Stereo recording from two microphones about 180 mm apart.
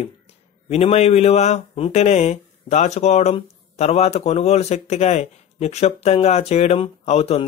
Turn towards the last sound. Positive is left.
turn(degrees=35)  # may be behind; listen again after turning